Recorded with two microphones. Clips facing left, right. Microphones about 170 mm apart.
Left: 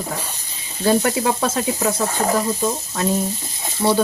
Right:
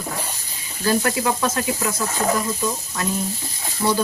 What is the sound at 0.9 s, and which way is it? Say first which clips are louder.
Speech: left 3 dB; 25° left (ahead or behind).